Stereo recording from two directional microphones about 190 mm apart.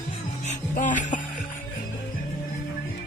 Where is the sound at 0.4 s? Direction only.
40° left (ahead or behind).